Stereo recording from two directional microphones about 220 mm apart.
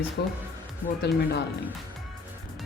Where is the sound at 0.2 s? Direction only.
45° left (ahead or behind).